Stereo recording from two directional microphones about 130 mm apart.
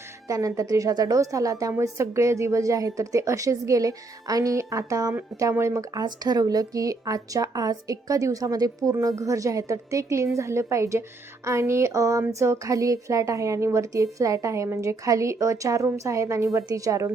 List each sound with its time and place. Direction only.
0.3 s speech: 25° right (ahead or behind)